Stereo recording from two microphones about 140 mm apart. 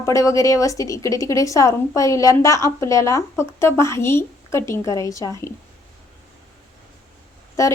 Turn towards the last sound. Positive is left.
turn(degrees=25)  # may be behind; listen again after turning